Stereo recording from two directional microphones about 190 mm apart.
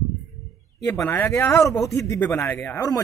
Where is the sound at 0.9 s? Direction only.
15° left (ahead or behind).